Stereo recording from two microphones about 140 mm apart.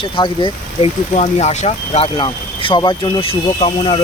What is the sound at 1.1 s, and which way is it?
Speech, 55° left (ahead or behind).